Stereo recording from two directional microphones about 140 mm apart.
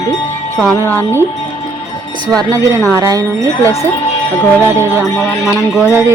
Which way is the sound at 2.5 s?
20° right (ahead or behind).